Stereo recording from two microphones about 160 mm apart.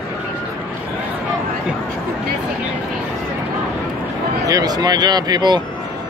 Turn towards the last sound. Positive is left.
turn(degrees=-25)  # may be behind; listen again after turning